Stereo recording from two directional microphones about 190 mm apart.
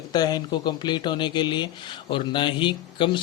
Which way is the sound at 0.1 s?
20° left (ahead or behind).